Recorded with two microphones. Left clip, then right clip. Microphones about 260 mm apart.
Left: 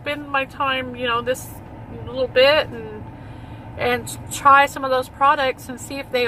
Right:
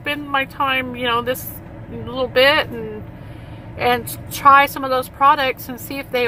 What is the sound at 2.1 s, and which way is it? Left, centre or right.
Speech, centre.